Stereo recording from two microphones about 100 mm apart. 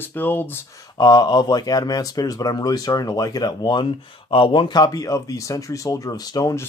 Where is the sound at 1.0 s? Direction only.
45° left (ahead or behind).